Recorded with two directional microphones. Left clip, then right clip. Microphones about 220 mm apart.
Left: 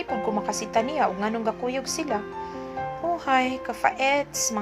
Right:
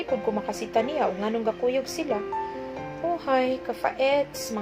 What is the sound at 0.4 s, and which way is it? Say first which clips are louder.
Speech: left 1 dB; 30° left (ahead or behind).